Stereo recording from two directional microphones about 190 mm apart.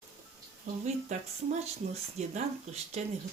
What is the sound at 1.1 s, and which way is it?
Speech, 40° right (ahead or behind).